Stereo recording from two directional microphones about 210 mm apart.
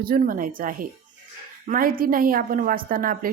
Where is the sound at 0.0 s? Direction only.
45° right (ahead or behind).